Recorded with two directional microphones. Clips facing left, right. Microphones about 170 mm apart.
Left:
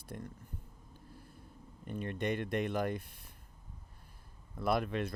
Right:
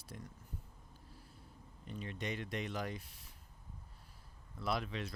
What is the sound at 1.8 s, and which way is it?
Speech, 55° left (ahead or behind).